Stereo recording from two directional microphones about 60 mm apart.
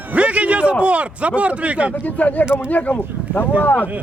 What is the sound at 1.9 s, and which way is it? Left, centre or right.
Speech, left.